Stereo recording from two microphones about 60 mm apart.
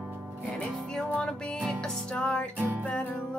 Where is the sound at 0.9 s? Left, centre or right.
Centre.